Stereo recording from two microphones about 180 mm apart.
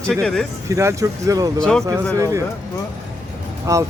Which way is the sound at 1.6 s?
5° left (ahead or behind).